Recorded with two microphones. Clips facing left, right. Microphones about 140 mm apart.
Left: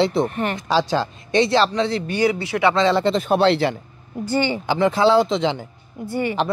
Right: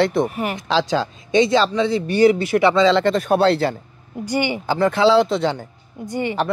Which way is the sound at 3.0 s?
50° right (ahead or behind).